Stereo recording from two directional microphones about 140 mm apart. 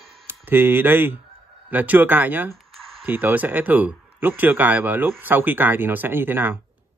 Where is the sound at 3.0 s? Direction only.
15° right (ahead or behind).